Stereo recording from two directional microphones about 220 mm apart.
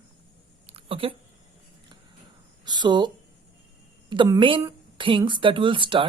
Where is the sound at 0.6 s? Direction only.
25° right (ahead or behind).